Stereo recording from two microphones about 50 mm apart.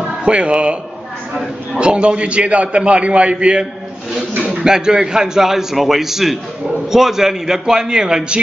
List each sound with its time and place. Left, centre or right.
0.2 s a man's voice: right
4.6 s a man's voice: centre